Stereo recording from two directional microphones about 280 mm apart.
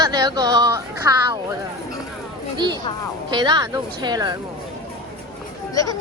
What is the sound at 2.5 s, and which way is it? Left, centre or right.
Speech, centre.